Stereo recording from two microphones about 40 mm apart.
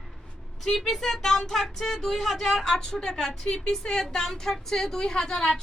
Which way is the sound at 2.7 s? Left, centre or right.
Centre.